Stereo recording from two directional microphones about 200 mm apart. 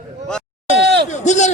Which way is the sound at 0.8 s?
55° right (ahead or behind).